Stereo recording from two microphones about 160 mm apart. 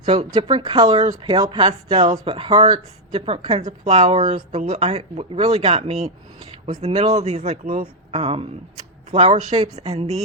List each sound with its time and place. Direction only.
0.0 s a woman's voice: 35° right (ahead or behind)